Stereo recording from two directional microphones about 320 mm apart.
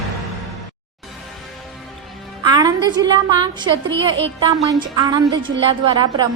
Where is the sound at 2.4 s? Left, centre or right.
Centre.